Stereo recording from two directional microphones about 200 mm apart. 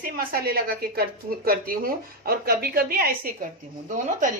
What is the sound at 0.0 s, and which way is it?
A woman's voice, 45° right (ahead or behind).